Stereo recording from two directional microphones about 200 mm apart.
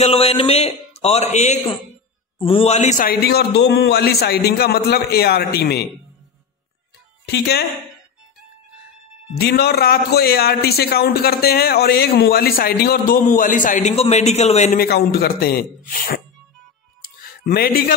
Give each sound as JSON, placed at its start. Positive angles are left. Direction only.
{"t": 0.0, "sound": "a man's voice", "side_deg": 30}
{"t": 7.2, "sound": "a man's voice", "side_deg": 55}
{"t": 9.4, "sound": "a man's voice", "side_deg": 55}
{"t": 14.8, "sound": "a man's voice", "side_deg": 50}
{"t": 17.2, "sound": "music", "side_deg": 50}